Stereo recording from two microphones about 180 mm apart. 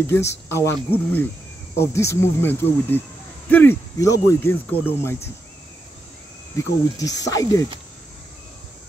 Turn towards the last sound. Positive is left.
turn(degrees=20)  # may be behind; listen again after turning